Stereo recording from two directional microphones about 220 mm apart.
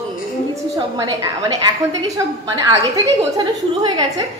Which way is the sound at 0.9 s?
15° right (ahead or behind).